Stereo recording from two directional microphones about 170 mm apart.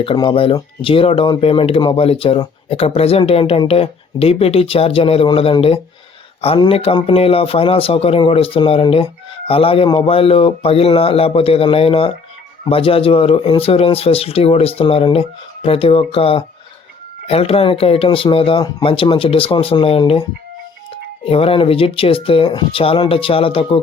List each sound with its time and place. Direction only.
0.0 s speech: 30° left (ahead or behind)
21.2 s speech: 35° left (ahead or behind)